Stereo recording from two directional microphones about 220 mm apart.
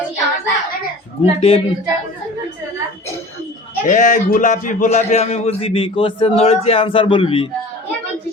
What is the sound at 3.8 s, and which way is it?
A man's voice, 35° left (ahead or behind).